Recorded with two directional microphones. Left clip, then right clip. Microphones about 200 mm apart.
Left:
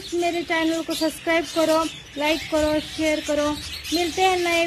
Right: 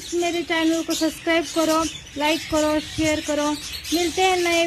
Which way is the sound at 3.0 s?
20° right (ahead or behind).